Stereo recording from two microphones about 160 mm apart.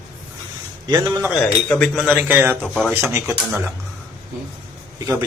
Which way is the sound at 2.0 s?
10° right (ahead or behind).